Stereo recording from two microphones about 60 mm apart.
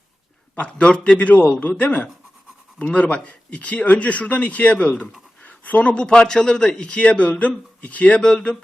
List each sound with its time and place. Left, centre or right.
0.5 s a man's voice: left